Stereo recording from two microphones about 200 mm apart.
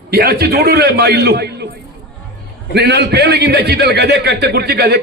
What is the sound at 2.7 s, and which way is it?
A man's voice, 55° right (ahead or behind).